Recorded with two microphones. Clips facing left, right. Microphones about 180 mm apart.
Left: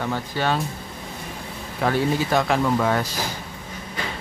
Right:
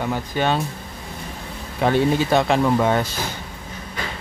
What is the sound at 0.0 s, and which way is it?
Speech, 15° right (ahead or behind).